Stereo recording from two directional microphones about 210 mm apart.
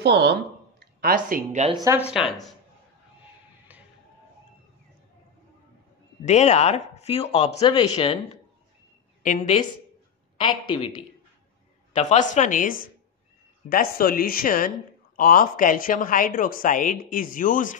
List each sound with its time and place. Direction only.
0.0 s speech: 55° right (ahead or behind)
1.7 s speech: 20° right (ahead or behind)
2.0 s speech: 5° right (ahead or behind)
6.2 s a woman's voice: 35° left (ahead or behind)
10.4 s a woman's voice: 25° left (ahead or behind)
11.9 s a woman's voice: 35° left (ahead or behind)